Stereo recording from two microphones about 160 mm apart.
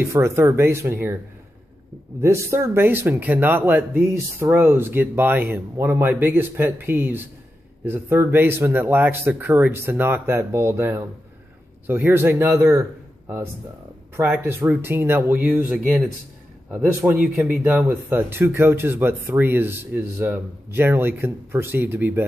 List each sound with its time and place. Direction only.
0.0 s speech: 15° right (ahead or behind)
2.2 s speech: 15° right (ahead or behind)
14.1 s speech: 15° right (ahead or behind)
16.8 s speech: 10° right (ahead or behind)